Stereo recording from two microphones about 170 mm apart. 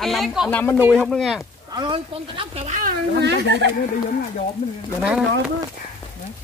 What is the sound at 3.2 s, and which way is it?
Speech, 90° right.